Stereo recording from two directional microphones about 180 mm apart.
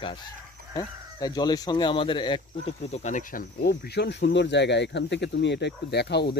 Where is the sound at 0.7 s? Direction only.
20° left (ahead or behind).